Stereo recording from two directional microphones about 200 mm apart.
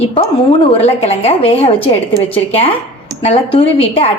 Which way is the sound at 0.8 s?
30° left (ahead or behind).